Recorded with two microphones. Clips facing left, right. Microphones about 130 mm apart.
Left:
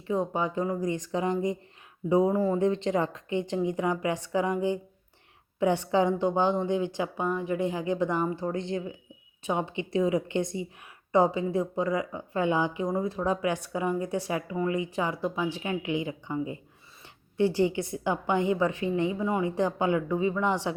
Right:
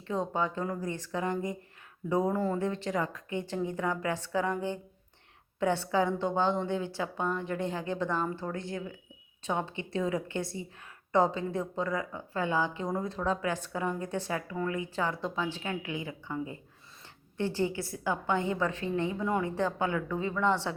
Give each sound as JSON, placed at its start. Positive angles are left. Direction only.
{"t": 0.1, "sound": "a woman's voice", "side_deg": 10}